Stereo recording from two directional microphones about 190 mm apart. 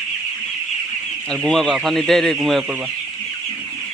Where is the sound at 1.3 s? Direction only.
5° left (ahead or behind).